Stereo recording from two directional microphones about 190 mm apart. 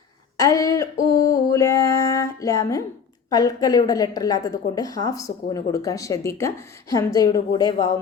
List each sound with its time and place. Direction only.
0.3 s speech: 15° left (ahead or behind)
1.1 s a sound: 15° left (ahead or behind)
3.2 s a woman's voice: 20° left (ahead or behind)